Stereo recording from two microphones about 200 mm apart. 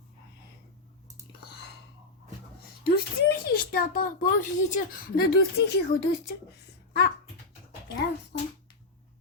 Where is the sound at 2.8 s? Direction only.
50° left (ahead or behind).